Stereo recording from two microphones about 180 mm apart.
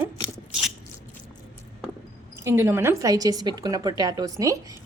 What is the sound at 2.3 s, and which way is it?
A woman's voice, 15° right (ahead or behind).